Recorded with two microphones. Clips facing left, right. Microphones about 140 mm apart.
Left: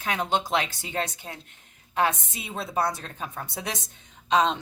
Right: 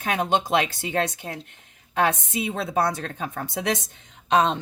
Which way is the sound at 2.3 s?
90° right.